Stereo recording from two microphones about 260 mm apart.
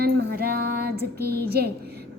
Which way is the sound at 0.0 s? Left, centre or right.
Right.